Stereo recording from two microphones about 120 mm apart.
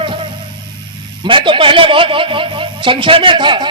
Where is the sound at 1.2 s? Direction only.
45° right (ahead or behind).